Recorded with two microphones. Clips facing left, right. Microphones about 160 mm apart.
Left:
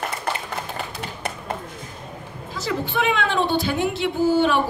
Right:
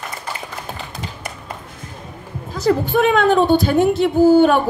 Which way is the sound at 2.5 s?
45° right (ahead or behind).